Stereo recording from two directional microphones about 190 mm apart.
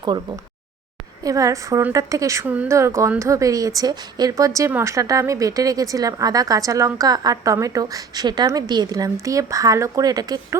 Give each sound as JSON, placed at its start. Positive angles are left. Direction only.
{"t": 0.0, "sound": "a woman's voice", "side_deg": -20}